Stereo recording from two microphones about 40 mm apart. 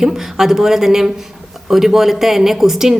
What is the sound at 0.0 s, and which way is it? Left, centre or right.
Speech, centre.